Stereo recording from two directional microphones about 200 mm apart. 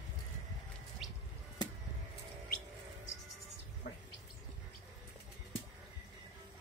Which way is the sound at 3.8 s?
50° left (ahead or behind).